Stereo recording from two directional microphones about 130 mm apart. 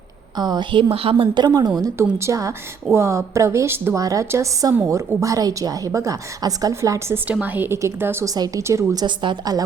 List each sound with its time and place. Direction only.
0.3 s a woman's voice: 30° right (ahead or behind)
7.3 s a woman's voice: 15° right (ahead or behind); by 9.6 s 30° right (ahead or behind)